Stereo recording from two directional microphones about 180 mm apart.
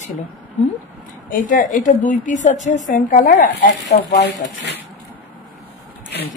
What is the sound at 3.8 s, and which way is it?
Speech, 70° left (ahead or behind).